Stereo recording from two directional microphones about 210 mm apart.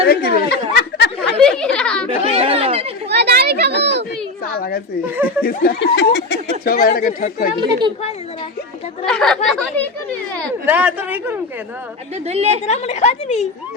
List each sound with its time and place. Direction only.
0.1 s a sound: 50° left (ahead or behind)
1.4 s chatter: 5° left (ahead or behind)
2.0 s chatter: 30° right (ahead or behind)
3.1 s children playing: 50° right (ahead or behind)
4.5 s a sound: 45° left (ahead or behind)
5.0 s speech: 10° right (ahead or behind)
5.4 s speech: 45° left (ahead or behind)
6.7 s speech: 45° left (ahead or behind)
9.0 s speech: centre (ahead or behind)
10.7 s speech: 5° right (ahead or behind)
12.2 s a woman's voice: 30° right (ahead or behind)
12.6 s a woman's voice: 35° left (ahead or behind)